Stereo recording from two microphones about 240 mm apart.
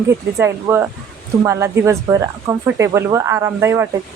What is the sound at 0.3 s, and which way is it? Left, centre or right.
A woman's voice, centre.